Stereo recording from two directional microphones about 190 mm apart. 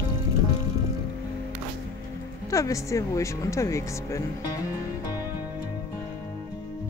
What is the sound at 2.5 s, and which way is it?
Speech, 15° left (ahead or behind).